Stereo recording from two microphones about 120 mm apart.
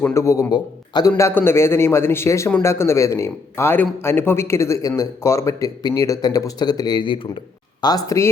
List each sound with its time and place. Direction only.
0.0 s a man's voice: 25° left (ahead or behind)
1.1 s a man's voice: 20° left (ahead or behind)